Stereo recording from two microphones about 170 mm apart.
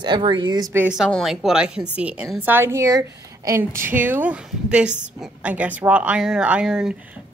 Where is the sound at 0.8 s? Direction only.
5° right (ahead or behind).